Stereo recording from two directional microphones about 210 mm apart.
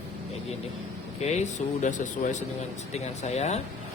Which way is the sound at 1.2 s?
35° left (ahead or behind).